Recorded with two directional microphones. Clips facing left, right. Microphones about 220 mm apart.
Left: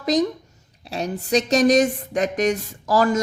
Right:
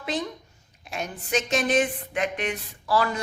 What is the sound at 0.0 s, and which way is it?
Speech, 40° left (ahead or behind).